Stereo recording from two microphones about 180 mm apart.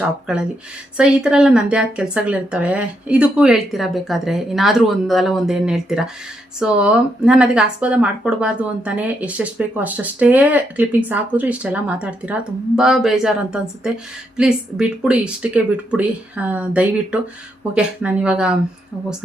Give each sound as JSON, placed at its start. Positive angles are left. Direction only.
{"t": 0.9, "sound": "a woman's voice", "side_deg": -5}